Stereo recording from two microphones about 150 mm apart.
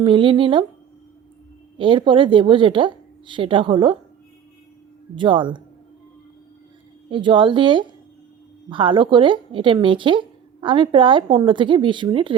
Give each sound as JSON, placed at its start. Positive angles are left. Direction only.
{"t": 0.0, "sound": "speech", "side_deg": -35}
{"t": 1.8, "sound": "speech", "side_deg": -35}
{"t": 5.1, "sound": "speech", "side_deg": -30}
{"t": 7.1, "sound": "speech", "side_deg": -35}